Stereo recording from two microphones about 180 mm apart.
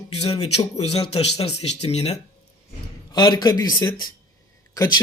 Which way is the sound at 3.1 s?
25° left (ahead or behind).